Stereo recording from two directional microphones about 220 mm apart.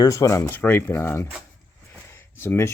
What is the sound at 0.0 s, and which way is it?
Speech, 15° left (ahead or behind).